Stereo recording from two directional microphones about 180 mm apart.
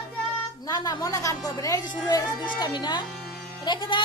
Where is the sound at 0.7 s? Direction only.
20° left (ahead or behind).